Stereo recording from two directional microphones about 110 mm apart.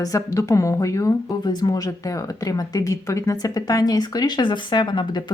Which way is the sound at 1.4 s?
40° left (ahead or behind).